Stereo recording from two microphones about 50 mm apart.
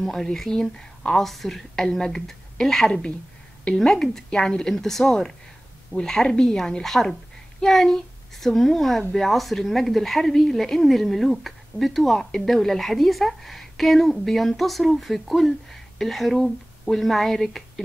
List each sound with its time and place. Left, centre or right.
0.0 s a woman's voice: centre